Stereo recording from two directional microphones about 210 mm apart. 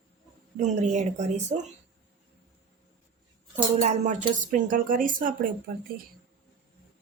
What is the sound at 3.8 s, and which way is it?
A woman's voice, 35° right (ahead or behind).